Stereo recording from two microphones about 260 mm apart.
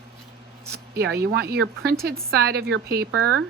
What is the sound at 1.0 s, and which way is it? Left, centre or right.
A woman's voice, right.